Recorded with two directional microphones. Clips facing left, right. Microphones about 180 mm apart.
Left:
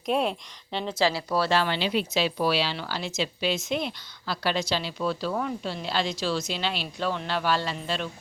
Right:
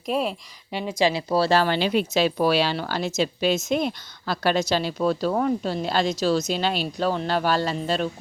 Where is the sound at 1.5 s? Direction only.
45° right (ahead or behind).